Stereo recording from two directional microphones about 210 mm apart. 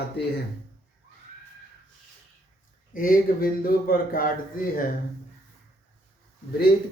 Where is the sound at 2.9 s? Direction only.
40° left (ahead or behind).